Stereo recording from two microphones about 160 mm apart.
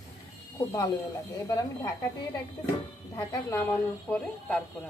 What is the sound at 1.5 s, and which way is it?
Speech, 25° left (ahead or behind).